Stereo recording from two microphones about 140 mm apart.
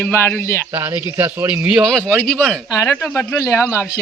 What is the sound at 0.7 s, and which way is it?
Speech, 15° right (ahead or behind).